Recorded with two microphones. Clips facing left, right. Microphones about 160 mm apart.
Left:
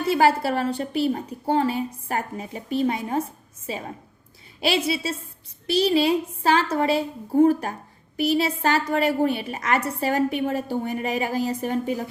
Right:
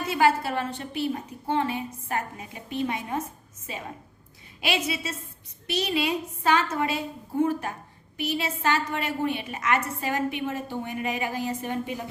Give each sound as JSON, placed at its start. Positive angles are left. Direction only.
{"t": 0.0, "sound": "a woman's voice", "side_deg": 35}
{"t": 5.0, "sound": "a woman's voice", "side_deg": 30}